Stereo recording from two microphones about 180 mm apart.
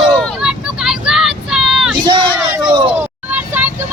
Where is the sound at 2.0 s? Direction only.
25° right (ahead or behind).